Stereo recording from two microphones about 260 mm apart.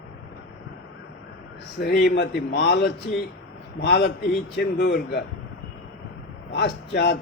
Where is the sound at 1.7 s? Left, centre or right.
Left.